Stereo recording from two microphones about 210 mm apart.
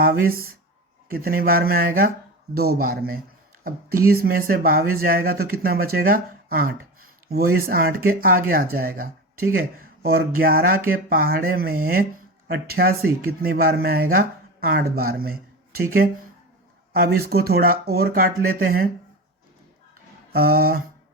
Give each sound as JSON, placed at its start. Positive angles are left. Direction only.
{"t": 0.0, "sound": "speech", "side_deg": -45}
{"t": 20.3, "sound": "speech", "side_deg": -45}